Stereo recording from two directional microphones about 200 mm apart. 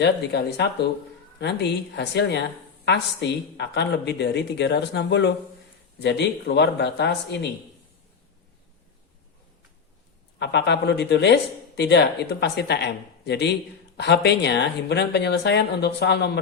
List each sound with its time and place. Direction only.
0.0 s speech: 55° left (ahead or behind)
10.4 s speech: 60° left (ahead or behind)